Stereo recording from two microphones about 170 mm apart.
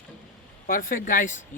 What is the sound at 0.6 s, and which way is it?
Speech, 55° left (ahead or behind).